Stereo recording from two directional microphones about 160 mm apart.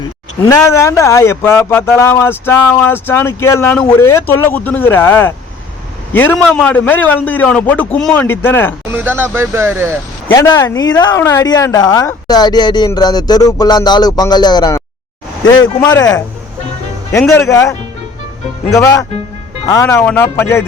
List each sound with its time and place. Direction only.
0.4 s speech: 20° left (ahead or behind)
6.3 s speech: 5° left (ahead or behind)
8.9 s speech: 10° right (ahead or behind)
10.5 s speech: 20° left (ahead or behind)
11.2 s speech: 15° left (ahead or behind)
15.9 s speech: 25° left (ahead or behind)
17.4 s speech: 20° left (ahead or behind)